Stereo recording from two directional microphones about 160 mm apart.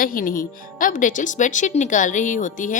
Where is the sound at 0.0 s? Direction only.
60° left (ahead or behind).